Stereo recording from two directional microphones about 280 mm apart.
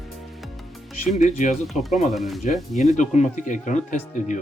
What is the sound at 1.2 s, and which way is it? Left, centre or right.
Speech, left.